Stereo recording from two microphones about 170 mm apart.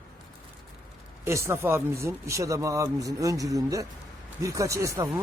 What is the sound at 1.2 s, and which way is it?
Speech, 15° right (ahead or behind).